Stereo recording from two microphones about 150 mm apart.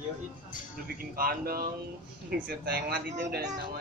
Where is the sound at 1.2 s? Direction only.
80° right.